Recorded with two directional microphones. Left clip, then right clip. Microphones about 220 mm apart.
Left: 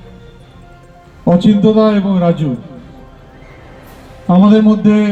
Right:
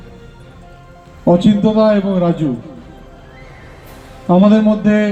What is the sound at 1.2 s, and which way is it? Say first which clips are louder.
A man's voice: left 1 dB; 40° left (ahead or behind).